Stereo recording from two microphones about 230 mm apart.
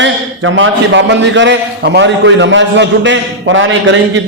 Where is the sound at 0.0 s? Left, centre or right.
Right.